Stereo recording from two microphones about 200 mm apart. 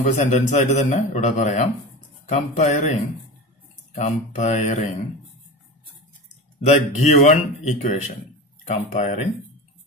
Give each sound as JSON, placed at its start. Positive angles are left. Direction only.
{"t": 0.0, "sound": "a man's voice", "side_deg": 35}
{"t": 6.6, "sound": "a man's voice", "side_deg": 35}